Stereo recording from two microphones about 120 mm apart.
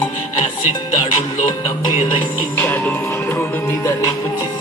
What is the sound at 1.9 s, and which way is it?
Music, 45° left (ahead or behind).